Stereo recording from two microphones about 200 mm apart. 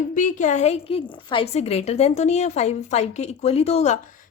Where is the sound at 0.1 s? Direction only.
40° left (ahead or behind).